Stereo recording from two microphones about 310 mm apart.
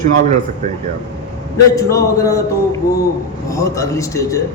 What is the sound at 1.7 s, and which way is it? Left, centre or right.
Speech, centre.